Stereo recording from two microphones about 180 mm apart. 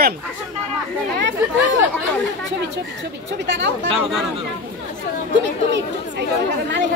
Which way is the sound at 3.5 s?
80° right.